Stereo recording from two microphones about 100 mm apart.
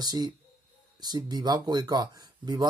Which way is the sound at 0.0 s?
40° right (ahead or behind).